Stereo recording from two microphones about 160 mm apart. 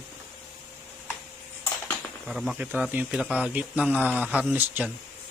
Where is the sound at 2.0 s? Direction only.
Centre (ahead or behind).